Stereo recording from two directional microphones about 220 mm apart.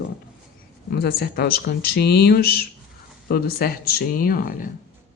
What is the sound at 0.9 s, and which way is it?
Speech, 45° left (ahead or behind).